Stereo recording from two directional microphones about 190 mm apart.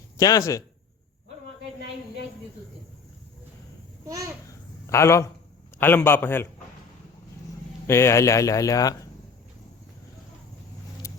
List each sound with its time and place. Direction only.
0.2 s speech: 20° left (ahead or behind)
4.0 s babbling: 15° right (ahead or behind)
4.9 s speech: 15° left (ahead or behind)
7.9 s speech: 15° left (ahead or behind)